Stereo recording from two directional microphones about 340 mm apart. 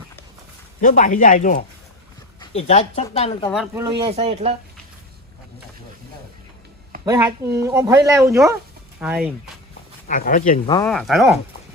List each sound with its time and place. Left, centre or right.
0.8 s speech: left
3.5 s speech: centre
7.0 s speech: centre
10.1 s speech: left
10.8 s speech: centre